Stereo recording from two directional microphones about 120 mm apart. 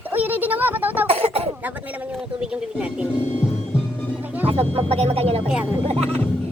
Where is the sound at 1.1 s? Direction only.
55° right (ahead or behind).